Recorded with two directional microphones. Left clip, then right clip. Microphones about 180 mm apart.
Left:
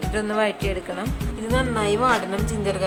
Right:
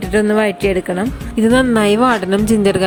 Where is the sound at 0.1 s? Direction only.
35° right (ahead or behind).